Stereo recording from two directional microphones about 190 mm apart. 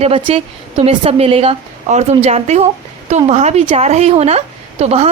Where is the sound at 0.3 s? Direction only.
30° right (ahead or behind).